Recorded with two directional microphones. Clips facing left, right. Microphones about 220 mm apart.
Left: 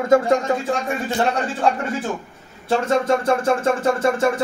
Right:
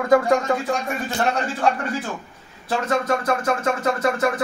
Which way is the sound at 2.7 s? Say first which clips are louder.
Left 4 dB; 25° left (ahead or behind).